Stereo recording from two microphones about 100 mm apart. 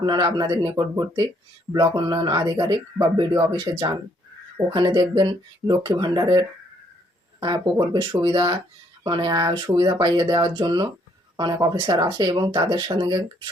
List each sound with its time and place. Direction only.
0.0 s speech: 45° right (ahead or behind)